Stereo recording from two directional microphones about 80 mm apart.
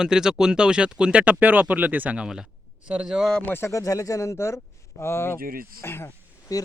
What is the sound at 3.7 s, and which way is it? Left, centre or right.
Speech, left.